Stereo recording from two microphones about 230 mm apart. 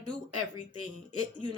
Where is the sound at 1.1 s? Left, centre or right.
Right.